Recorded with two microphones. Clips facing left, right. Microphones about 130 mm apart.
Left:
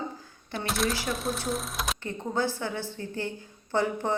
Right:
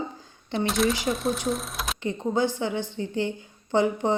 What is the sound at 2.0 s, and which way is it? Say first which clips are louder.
A woman's voice: right 6 dB; 20° right (ahead or behind).